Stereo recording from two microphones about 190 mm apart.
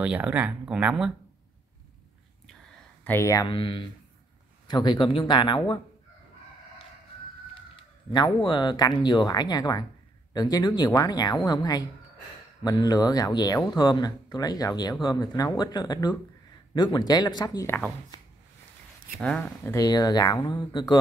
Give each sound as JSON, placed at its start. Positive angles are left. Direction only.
{"t": 0.0, "sound": "speech", "side_deg": -5}
{"t": 3.0, "sound": "speech", "side_deg": 10}
{"t": 8.1, "sound": "speech", "side_deg": 25}
{"t": 19.1, "sound": "speech", "side_deg": 5}
{"t": 19.7, "sound": "speech", "side_deg": 20}